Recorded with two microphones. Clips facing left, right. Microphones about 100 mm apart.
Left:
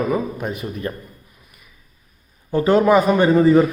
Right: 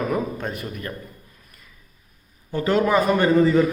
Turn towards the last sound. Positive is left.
turn(degrees=20)  # may be behind; listen again after turning